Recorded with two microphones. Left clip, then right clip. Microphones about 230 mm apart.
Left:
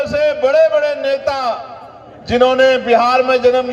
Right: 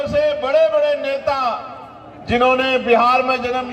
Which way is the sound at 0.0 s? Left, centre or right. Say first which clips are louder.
Left 3 dB; left.